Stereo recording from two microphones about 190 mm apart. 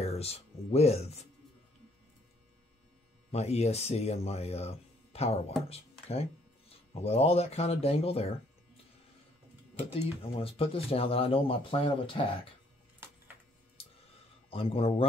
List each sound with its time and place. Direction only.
0.0 s speech: 35° left (ahead or behind)
3.3 s speech: 35° left (ahead or behind)
10.3 s speech: 30° left (ahead or behind)
14.5 s speech: 30° left (ahead or behind)